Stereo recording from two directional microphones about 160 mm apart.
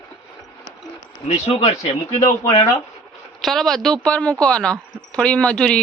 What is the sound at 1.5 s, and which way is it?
Speech, 40° left (ahead or behind).